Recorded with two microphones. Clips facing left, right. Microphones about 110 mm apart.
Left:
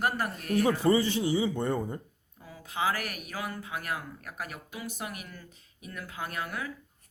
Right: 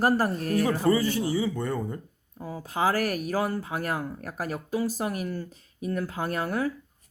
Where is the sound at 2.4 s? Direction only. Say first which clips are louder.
Right 5 dB; 40° right (ahead or behind).